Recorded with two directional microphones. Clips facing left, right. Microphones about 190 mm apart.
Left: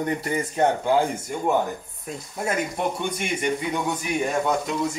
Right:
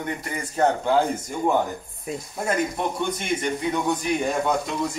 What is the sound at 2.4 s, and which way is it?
Speech, 10° left (ahead or behind).